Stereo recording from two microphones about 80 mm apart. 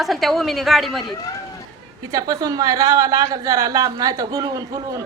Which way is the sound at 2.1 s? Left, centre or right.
Right.